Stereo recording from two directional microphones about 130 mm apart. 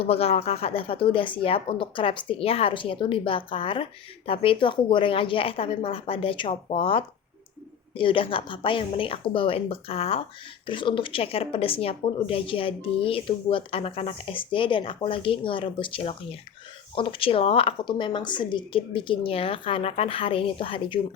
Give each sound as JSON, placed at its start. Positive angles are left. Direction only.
{"t": 0.0, "sound": "speech", "side_deg": 50}